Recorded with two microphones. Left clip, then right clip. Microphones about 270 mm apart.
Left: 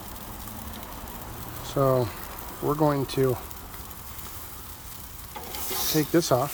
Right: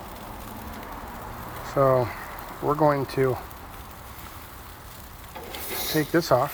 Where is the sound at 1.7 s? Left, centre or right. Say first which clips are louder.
Right 3 dB; left.